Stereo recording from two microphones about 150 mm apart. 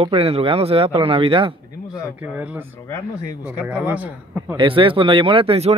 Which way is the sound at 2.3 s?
10° right (ahead or behind).